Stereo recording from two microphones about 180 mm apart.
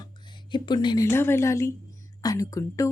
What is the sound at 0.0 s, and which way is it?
A woman's voice, 25° left (ahead or behind).